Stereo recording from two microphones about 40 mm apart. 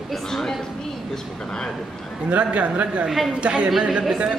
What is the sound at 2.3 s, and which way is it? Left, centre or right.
A man's voice, right.